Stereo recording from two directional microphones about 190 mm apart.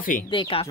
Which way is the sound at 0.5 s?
30° left (ahead or behind).